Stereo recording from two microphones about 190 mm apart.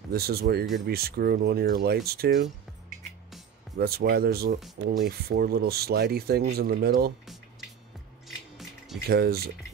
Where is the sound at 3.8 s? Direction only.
55° right (ahead or behind).